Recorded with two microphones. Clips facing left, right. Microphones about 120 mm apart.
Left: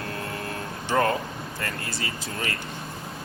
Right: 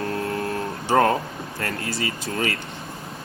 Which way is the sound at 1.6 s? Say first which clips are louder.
Right 6 dB; 60° right (ahead or behind).